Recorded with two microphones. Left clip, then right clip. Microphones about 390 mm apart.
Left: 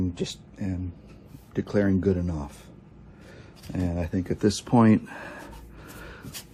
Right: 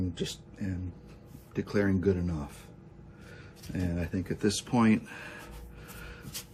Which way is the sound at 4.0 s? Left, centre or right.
Centre.